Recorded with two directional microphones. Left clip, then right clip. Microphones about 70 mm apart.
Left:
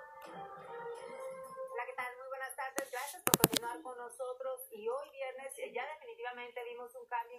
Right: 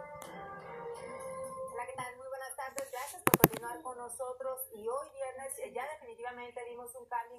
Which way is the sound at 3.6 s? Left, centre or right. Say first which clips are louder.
Right 1 dB; centre.